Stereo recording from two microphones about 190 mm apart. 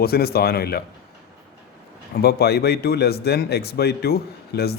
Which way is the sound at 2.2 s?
55° left (ahead or behind).